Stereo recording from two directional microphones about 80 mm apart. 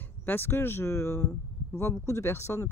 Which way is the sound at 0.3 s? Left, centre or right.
Left.